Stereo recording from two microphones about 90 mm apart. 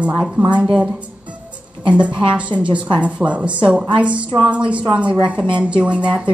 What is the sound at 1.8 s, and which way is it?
A woman's voice, 15° right (ahead or behind).